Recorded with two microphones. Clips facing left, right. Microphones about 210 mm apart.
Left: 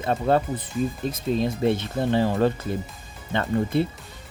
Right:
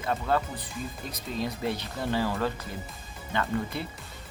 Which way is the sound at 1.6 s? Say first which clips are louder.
Left 8 dB; 25° left (ahead or behind).